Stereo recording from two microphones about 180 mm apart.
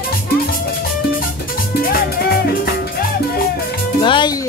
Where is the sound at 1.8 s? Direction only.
55° left (ahead or behind).